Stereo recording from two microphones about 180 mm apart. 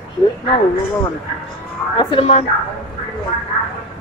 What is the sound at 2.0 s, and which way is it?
Speech, 30° left (ahead or behind).